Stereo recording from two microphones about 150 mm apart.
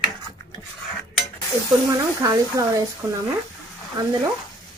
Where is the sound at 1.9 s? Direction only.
25° right (ahead or behind).